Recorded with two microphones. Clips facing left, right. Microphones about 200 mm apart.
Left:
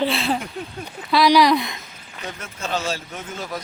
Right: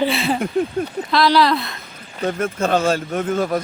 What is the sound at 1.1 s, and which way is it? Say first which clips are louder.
Speech: left 1 dB; 15° left (ahead or behind).